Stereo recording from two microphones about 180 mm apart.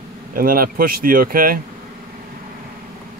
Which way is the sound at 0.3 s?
50° right (ahead or behind).